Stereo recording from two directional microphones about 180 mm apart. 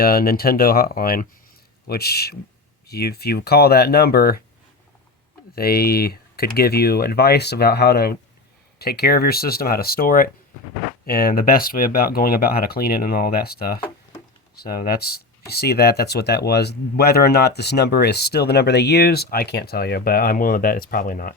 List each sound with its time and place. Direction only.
0.0 s speech: 55° left (ahead or behind)
5.5 s speech: 55° left (ahead or behind)